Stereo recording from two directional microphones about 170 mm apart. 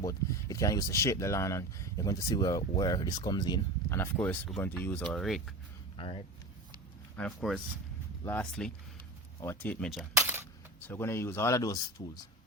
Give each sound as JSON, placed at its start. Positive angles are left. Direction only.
{"t": 0.0, "sound": "speech", "side_deg": 20}
{"t": 6.0, "sound": "speech", "side_deg": 30}
{"t": 7.2, "sound": "speech", "side_deg": 5}
{"t": 10.2, "sound": "a sound", "side_deg": -15}
{"t": 10.8, "sound": "speech", "side_deg": 10}